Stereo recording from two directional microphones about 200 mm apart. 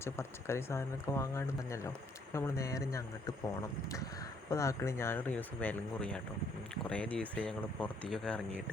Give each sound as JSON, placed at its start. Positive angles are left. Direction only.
{"t": 0.0, "sound": "speech", "side_deg": 10}
{"t": 4.4, "sound": "speech", "side_deg": 15}